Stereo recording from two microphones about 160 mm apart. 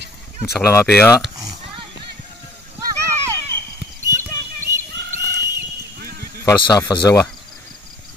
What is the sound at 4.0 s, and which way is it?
Clip-clop, 15° right (ahead or behind).